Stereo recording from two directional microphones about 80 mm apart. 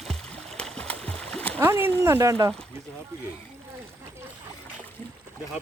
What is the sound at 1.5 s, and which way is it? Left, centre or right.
Speech, right.